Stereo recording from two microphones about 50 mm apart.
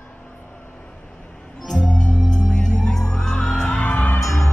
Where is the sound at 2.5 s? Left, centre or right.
Centre.